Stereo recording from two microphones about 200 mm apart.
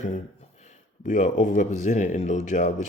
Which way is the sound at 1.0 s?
40° left (ahead or behind).